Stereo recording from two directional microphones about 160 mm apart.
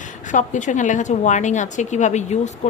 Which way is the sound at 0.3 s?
50° left (ahead or behind).